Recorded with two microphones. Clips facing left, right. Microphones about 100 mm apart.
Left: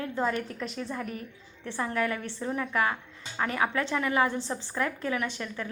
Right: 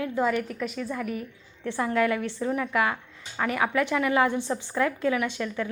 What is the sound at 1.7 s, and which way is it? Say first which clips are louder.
A woman's voice: right 5 dB; 10° right (ahead or behind).